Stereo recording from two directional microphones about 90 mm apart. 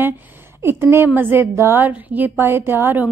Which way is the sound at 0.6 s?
25° right (ahead or behind).